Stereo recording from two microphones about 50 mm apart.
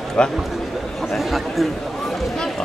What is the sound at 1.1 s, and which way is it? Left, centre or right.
Chatter, centre.